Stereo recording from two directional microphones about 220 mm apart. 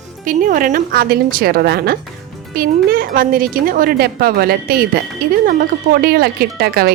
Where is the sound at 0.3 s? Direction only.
40° right (ahead or behind).